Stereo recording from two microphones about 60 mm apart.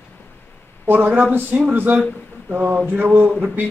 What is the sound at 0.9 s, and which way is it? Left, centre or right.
Speech, right.